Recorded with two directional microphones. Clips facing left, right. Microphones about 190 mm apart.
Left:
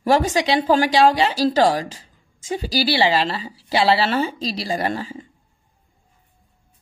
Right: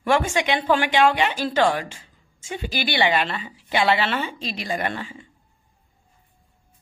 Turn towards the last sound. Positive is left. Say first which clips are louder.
# left 4 dB
turn(degrees=35)  # may be behind; listen again after turning